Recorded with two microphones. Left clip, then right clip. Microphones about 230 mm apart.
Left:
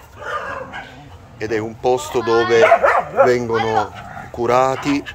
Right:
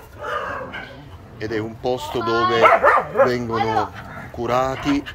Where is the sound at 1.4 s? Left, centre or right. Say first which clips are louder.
Left 5 dB; centre.